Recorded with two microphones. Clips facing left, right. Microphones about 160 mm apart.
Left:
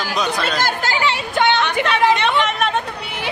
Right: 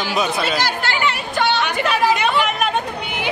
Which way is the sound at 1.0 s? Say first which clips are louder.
Left 2 dB; 25° left (ahead or behind).